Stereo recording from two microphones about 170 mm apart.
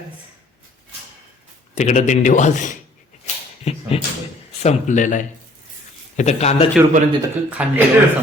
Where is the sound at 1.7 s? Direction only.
45° left (ahead or behind).